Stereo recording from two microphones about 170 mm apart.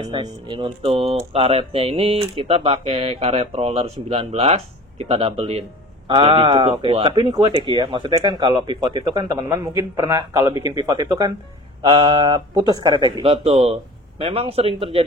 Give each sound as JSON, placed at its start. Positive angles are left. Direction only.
{"t": 0.1, "sound": "speech", "side_deg": -30}